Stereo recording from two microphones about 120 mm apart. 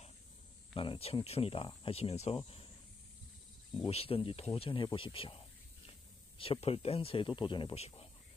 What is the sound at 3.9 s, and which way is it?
Speech, 55° left (ahead or behind).